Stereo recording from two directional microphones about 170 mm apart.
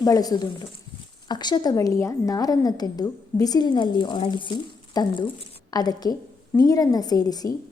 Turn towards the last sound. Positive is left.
turn(degrees=20)  # may be behind; listen again after turning